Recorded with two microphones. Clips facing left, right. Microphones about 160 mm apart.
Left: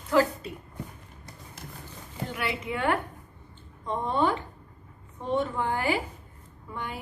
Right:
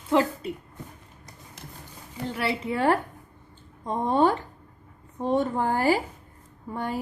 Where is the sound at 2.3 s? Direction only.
30° right (ahead or behind).